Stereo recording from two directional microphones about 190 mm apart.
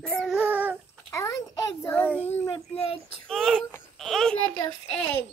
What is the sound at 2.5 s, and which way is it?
Speech, 30° left (ahead or behind).